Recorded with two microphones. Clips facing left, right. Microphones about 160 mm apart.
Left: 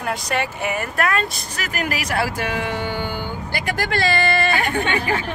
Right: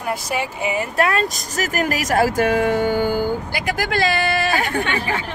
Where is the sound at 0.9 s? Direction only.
35° right (ahead or behind).